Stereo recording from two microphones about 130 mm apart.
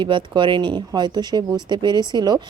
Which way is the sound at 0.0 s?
40° right (ahead or behind).